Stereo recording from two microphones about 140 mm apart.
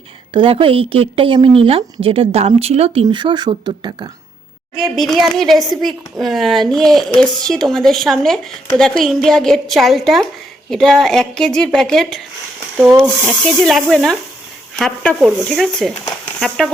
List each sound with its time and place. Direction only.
0.3 s speech: 40° right (ahead or behind)
3.1 s speech: 35° right (ahead or behind)
4.8 s a woman's voice: centre (ahead or behind)
12.7 s speech: 10° right (ahead or behind)
13.0 s a woman's voice: 5° left (ahead or behind)